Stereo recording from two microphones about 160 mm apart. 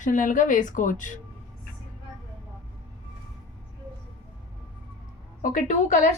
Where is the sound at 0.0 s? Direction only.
50° left (ahead or behind).